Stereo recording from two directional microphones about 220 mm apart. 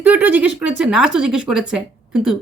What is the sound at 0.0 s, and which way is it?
A woman's voice, 10° right (ahead or behind).